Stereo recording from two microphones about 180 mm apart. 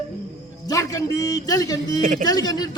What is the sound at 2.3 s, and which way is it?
Speech, 20° left (ahead or behind).